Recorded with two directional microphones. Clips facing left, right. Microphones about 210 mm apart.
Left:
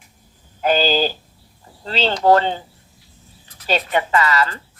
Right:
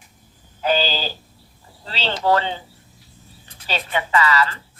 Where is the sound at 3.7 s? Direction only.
45° left (ahead or behind).